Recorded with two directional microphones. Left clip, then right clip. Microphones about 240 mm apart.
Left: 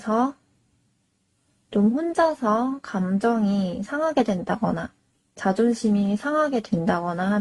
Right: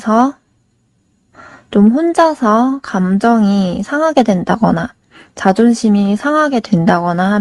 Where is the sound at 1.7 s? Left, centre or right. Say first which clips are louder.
Right 11 dB; right.